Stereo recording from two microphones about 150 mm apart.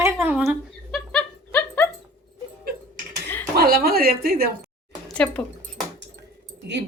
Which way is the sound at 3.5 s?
90° right.